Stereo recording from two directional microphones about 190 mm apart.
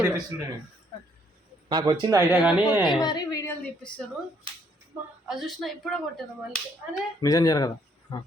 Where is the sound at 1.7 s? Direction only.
25° right (ahead or behind).